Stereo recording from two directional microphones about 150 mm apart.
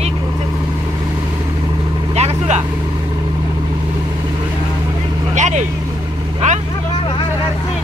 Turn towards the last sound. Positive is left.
turn(degrees=-55)  # may be behind; listen again after turning